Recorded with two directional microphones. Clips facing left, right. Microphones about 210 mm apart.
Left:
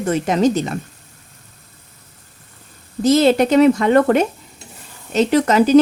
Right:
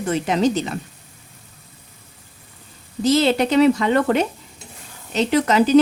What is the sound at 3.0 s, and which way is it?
Speech, 45° left (ahead or behind).